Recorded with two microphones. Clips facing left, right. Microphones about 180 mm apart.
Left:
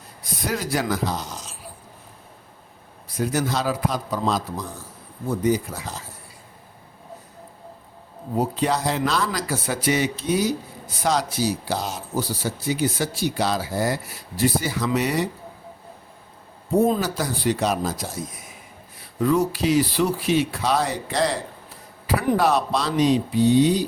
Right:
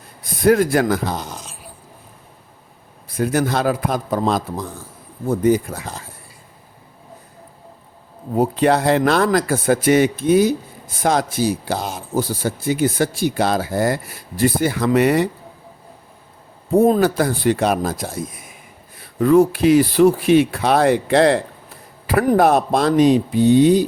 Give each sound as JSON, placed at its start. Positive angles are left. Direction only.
{"t": 0.2, "sound": "speech", "side_deg": -55}
{"t": 3.1, "sound": "speech", "side_deg": -55}
{"t": 8.4, "sound": "speech", "side_deg": -60}
{"t": 16.8, "sound": "speech", "side_deg": -55}